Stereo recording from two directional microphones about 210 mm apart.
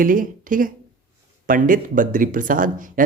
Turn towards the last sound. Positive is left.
turn(degrees=-40)  # may be behind; listen again after turning